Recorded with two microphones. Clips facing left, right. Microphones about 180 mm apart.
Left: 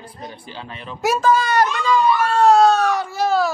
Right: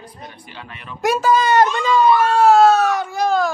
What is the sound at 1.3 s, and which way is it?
Speech, 20° right (ahead or behind).